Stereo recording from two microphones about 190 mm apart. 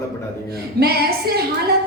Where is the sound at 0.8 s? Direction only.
55° right (ahead or behind).